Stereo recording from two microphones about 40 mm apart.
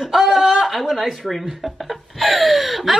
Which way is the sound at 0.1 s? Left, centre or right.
Centre.